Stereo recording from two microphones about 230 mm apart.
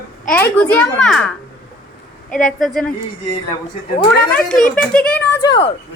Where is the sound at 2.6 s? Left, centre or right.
Centre.